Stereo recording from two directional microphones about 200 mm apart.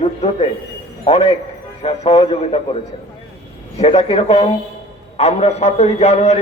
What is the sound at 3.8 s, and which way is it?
A man's voice, 30° left (ahead or behind).